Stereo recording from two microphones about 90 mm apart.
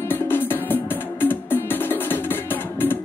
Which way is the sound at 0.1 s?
25° left (ahead or behind).